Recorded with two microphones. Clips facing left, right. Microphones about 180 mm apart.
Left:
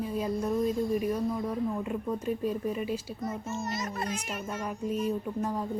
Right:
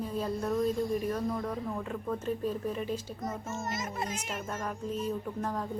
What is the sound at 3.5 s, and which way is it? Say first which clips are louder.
Speech: left 2 dB; 50° right (ahead or behind).